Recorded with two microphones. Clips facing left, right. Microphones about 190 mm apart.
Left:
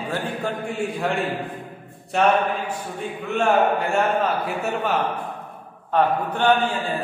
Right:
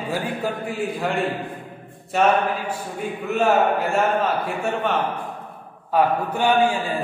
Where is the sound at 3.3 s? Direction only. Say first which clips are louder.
Even; centre (ahead or behind).